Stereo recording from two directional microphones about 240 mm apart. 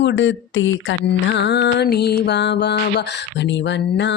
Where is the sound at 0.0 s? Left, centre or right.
Left.